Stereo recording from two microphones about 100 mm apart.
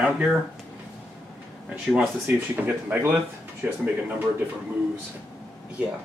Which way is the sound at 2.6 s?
15° right (ahead or behind).